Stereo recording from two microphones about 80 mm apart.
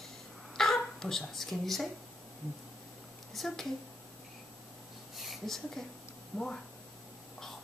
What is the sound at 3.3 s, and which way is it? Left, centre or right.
Speech, centre.